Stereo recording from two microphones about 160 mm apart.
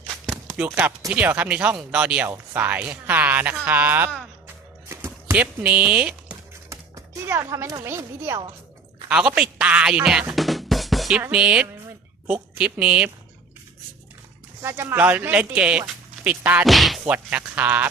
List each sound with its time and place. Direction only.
0.3 s speech: 5° right (ahead or behind)
4.9 s a sound: 15° right (ahead or behind)
6.7 s speech: 20° right (ahead or behind)
9.0 s music: 5° right (ahead or behind)
11.2 s speech: 5° right (ahead or behind)
14.6 s speech: 15° right (ahead or behind)
17.0 s speech: 10° right (ahead or behind)